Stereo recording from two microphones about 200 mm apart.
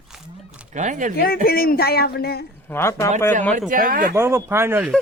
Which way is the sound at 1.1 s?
50° left (ahead or behind).